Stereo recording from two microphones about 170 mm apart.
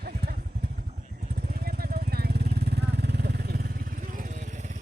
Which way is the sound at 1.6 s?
60° right (ahead or behind).